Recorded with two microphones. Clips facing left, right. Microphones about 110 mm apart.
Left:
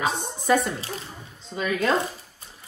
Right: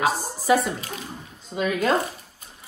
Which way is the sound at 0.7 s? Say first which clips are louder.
Left 1 dB; 30° left (ahead or behind).